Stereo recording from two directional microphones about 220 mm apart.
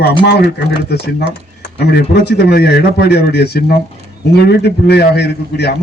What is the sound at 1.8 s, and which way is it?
A man's voice, 50° left (ahead or behind).